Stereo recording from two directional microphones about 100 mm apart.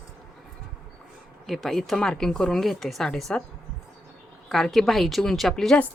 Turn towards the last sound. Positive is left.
turn(degrees=5)  # may be behind; listen again after turning